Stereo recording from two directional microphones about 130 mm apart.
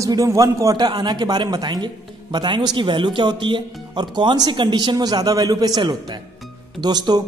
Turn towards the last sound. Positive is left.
turn(degrees=-30)  # may be behind; listen again after turning